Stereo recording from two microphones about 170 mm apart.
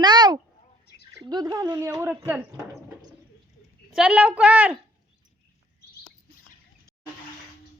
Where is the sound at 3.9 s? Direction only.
5° right (ahead or behind).